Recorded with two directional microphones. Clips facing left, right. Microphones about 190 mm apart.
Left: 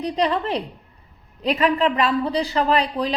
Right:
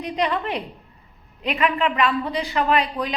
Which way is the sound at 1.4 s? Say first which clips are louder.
Left 3 dB; 35° left (ahead or behind).